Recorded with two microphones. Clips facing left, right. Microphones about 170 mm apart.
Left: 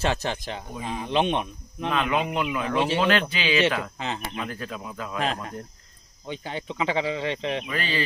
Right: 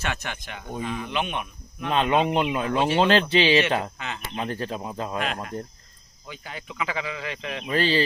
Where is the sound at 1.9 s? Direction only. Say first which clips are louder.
Right 4 dB; 30° right (ahead or behind).